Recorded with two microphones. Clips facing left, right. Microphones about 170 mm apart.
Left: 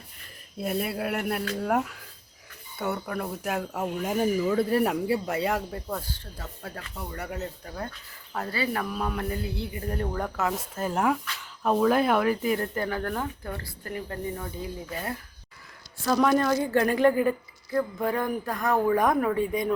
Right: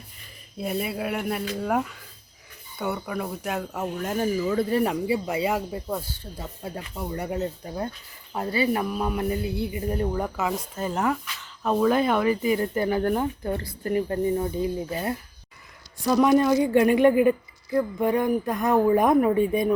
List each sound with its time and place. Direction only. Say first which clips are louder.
0.6 s speech: right 1 dB; centre (ahead or behind)
12.6 s speech: right 6 dB; 15° right (ahead or behind)
16.0 s speech: right 4 dB; 10° right (ahead or behind)